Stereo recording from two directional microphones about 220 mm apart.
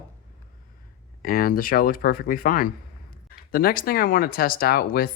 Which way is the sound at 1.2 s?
40° left (ahead or behind).